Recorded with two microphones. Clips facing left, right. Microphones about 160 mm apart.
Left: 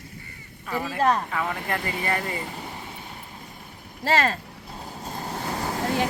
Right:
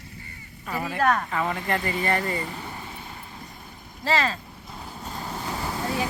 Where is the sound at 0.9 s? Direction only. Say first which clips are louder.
Left 1 dB; 30° left (ahead or behind).